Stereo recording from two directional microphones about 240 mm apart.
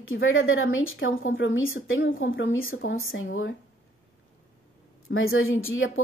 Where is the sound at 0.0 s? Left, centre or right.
Left.